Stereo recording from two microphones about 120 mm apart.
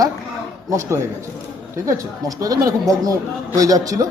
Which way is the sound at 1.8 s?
30° right (ahead or behind).